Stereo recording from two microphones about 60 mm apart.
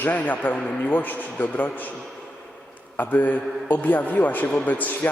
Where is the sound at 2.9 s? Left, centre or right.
Left.